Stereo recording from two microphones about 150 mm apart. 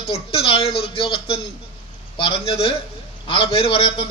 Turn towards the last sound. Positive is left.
turn(degrees=35)  # may be behind; listen again after turning